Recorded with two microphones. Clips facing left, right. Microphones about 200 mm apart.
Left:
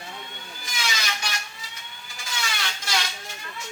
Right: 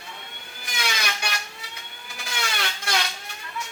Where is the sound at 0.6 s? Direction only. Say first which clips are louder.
Right 2 dB; 60° right (ahead or behind).